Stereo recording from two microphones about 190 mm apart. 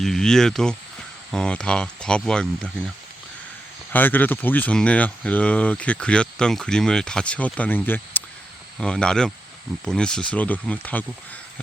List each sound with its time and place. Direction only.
0.0 s speech: 5° left (ahead or behind)
3.9 s speech: 10° left (ahead or behind)